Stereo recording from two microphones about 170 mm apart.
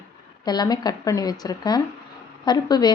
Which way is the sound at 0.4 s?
25° left (ahead or behind).